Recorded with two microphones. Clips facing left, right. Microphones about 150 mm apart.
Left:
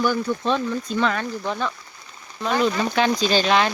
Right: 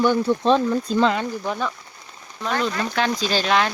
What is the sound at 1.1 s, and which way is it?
Speech, 15° right (ahead or behind).